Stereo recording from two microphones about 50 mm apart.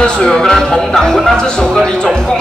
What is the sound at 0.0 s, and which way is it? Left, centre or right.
Speech, centre.